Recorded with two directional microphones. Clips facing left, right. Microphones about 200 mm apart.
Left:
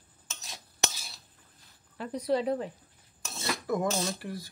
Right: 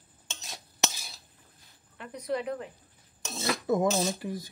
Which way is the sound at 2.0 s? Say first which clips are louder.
Left 4 dB; 35° left (ahead or behind).